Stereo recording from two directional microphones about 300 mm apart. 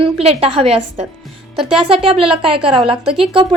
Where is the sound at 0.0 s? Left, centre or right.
Centre.